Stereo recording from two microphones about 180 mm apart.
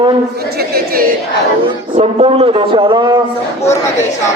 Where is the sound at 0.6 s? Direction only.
60° right (ahead or behind).